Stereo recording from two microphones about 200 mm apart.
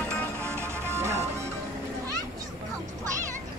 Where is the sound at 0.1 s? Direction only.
5° left (ahead or behind).